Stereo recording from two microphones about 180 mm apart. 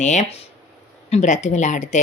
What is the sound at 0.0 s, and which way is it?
Speech, 40° left (ahead or behind).